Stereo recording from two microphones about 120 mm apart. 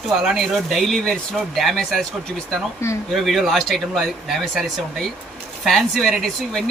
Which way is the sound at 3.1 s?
Centre (ahead or behind).